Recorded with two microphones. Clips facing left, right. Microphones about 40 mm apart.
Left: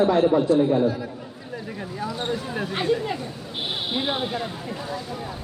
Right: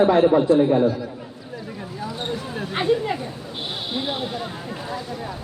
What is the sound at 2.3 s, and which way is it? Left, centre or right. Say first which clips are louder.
Speech: left 1 dB; centre.